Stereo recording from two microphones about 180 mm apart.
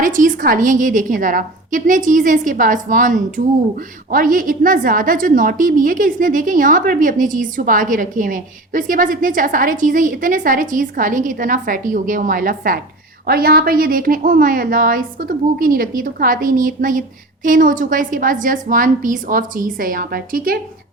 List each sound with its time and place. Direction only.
0.0 s a woman's voice: 50° right (ahead or behind)